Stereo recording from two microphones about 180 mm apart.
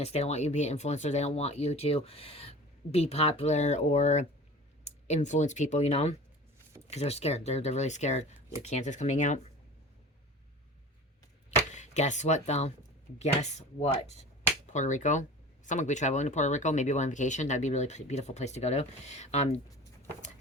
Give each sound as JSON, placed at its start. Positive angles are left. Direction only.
{"t": 0.0, "sound": "speech", "side_deg": 35}
{"t": 11.7, "sound": "speech", "side_deg": 40}